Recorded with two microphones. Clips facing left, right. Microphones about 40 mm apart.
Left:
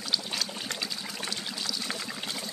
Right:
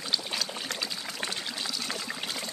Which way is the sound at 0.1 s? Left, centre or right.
Centre.